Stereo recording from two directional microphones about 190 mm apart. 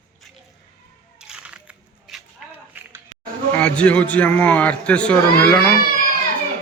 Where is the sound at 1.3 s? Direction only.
5° right (ahead or behind).